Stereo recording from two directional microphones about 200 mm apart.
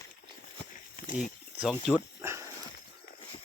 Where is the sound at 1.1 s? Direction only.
40° left (ahead or behind).